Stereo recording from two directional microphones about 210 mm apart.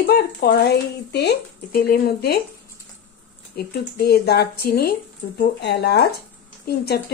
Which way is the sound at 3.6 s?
50° left (ahead or behind).